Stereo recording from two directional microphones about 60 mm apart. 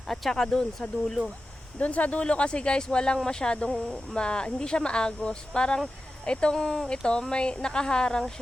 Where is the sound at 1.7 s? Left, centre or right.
Left.